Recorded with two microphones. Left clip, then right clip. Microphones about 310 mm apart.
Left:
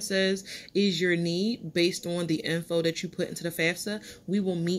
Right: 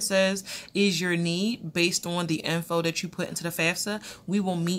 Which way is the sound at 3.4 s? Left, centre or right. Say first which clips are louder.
Right 1 dB; right.